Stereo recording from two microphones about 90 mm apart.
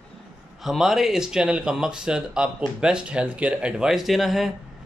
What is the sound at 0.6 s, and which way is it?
Speech, 5° right (ahead or behind).